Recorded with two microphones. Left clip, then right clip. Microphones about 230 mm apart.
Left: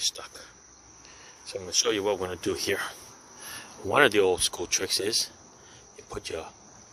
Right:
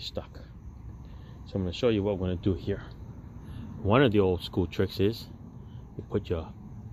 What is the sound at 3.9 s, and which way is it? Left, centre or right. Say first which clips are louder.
Speech: left 4 dB; left.